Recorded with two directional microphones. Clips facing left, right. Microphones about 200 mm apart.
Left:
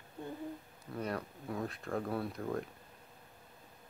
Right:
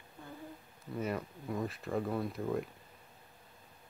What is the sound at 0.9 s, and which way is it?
Speech, 5° right (ahead or behind).